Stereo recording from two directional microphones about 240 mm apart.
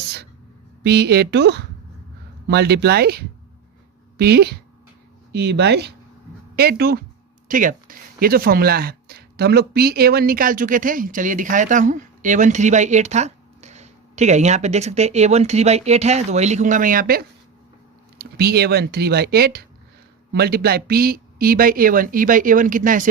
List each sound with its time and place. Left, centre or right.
0.9 s speech: right